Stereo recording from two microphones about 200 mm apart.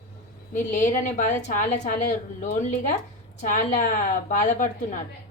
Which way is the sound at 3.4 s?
40° left (ahead or behind).